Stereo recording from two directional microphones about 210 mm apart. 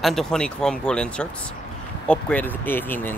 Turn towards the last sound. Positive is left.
turn(degrees=10)  # may be behind; listen again after turning